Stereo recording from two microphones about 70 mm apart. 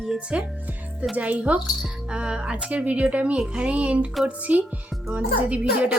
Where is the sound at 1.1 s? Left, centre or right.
Right.